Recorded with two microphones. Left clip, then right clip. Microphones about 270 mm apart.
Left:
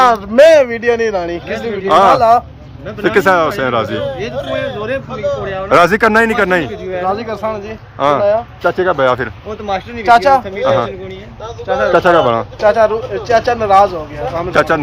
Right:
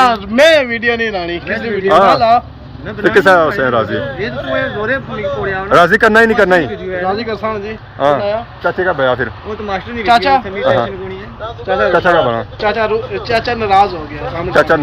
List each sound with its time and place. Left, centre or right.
0.0 s a man's voice: centre
4.0 s a man's voice: left
4.6 s a man's voice: centre
10.1 s speech: left
11.9 s a man's voice: left